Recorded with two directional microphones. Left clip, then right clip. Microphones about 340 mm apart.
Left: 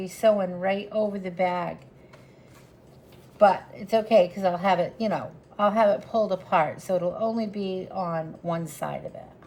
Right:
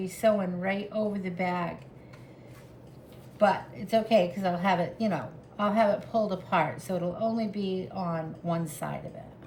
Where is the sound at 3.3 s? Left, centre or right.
Centre.